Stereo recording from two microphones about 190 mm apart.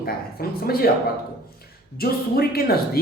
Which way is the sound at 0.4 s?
50° left (ahead or behind).